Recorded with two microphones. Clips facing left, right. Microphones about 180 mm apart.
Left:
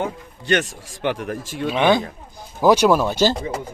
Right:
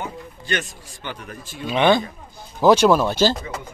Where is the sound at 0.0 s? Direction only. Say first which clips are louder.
Left 5 dB; 70° left (ahead or behind).